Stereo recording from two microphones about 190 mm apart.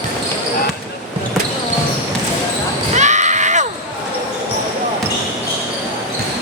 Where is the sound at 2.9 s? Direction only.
40° right (ahead or behind).